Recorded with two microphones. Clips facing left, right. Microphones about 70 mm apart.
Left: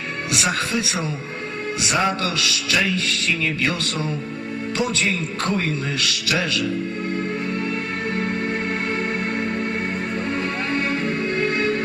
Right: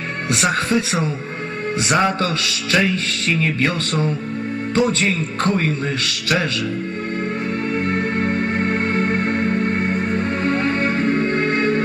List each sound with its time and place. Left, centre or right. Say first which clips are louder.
0.3 s a man's voice: right 5 dB; right
4.7 s a man's voice: right 5 dB; right
7.9 s music: right 4 dB; right
9.4 s music: right 5 dB; centre
9.7 s music: right 5 dB; right